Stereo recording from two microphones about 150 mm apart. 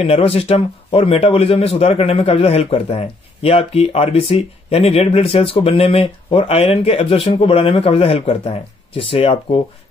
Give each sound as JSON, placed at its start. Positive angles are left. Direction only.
{"t": 0.0, "sound": "speech", "side_deg": 40}